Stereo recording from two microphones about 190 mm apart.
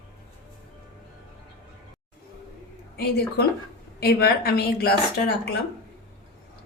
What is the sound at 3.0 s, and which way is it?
A woman's voice, 60° left (ahead or behind).